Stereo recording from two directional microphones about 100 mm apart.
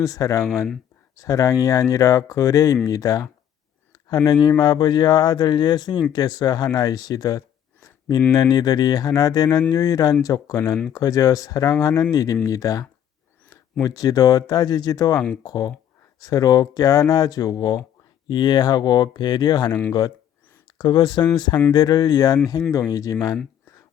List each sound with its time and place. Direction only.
0.0 s speech: 35° left (ahead or behind)
6.7 s a sound: 40° left (ahead or behind)
8.3 s speech: 40° left (ahead or behind)